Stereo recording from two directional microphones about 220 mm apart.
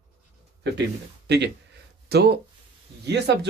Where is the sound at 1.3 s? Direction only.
50° right (ahead or behind).